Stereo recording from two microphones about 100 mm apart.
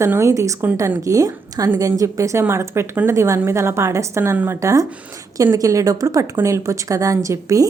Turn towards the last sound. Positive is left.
turn(degrees=-35)  # may be behind; listen again after turning